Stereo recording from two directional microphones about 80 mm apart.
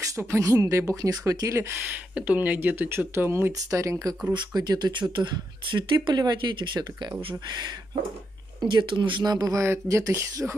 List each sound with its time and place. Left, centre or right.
0.1 s speech: right
1.9 s speech: centre; by 4.1 s right
4.3 s speech: right
9.2 s speech: right